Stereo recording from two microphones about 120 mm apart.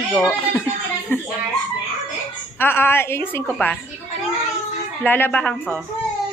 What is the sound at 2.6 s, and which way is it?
Speech, 20° left (ahead or behind).